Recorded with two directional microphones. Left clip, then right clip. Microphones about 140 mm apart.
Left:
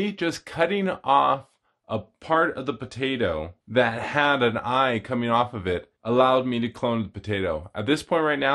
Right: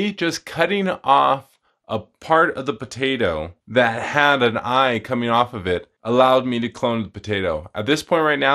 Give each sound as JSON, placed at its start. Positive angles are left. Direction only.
{"t": 0.0, "sound": "speech", "side_deg": -30}